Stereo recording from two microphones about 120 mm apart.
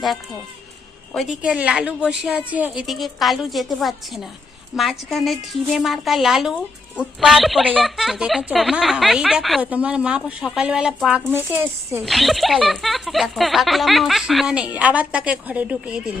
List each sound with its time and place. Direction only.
1.1 s speech: centre (ahead or behind)
1.4 s speech: 10° right (ahead or behind)
2.8 s speech: centre (ahead or behind)
9.6 s speech: 10° right (ahead or behind)
11.3 s speech: 15° right (ahead or behind)
12.0 s speech: centre (ahead or behind)